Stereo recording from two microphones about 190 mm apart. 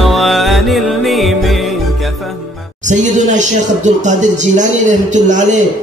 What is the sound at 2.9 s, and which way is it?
A man's voice, 40° right (ahead or behind).